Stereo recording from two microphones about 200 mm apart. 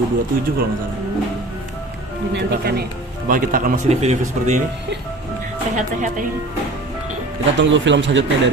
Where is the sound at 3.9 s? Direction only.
35° right (ahead or behind).